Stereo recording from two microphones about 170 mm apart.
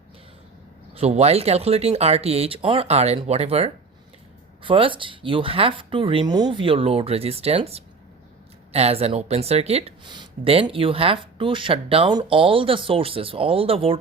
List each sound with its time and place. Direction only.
0.9 s speech: 40° right (ahead or behind)